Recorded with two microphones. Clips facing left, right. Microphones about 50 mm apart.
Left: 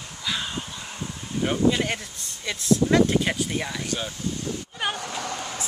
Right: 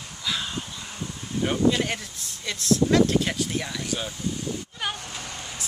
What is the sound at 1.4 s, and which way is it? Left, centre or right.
Speech, centre.